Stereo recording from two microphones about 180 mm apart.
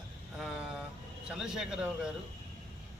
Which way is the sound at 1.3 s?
5° right (ahead or behind).